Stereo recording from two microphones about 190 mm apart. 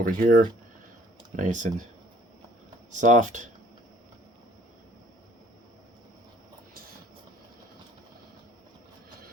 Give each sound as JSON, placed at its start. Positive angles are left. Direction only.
{"t": 0.0, "sound": "speech", "side_deg": -45}
{"t": 2.9, "sound": "speech", "side_deg": -40}